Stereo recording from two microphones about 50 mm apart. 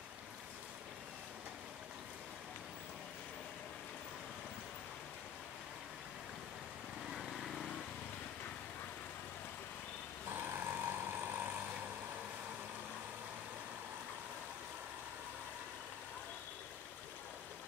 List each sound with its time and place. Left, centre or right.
7.1 s vehicle: centre
10.4 s vehicle: right